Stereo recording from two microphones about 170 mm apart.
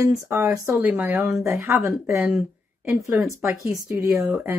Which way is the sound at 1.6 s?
15° right (ahead or behind).